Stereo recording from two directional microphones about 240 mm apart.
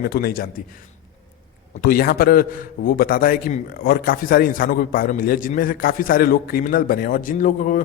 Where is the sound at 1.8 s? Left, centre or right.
Left.